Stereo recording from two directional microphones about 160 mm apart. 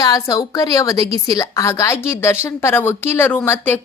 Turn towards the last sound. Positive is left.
turn(degrees=15)  # may be behind; listen again after turning